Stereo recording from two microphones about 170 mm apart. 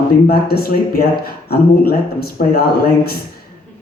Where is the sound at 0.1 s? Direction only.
65° left (ahead or behind).